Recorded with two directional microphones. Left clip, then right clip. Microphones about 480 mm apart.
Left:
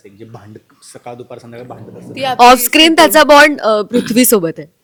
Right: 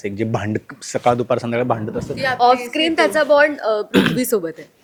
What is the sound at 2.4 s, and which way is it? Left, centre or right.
A woman's voice, left.